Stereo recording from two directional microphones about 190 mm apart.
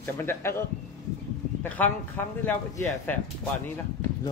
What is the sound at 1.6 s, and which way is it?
Speech, 10° left (ahead or behind).